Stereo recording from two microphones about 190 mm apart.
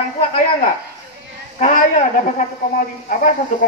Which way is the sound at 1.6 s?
45° left (ahead or behind).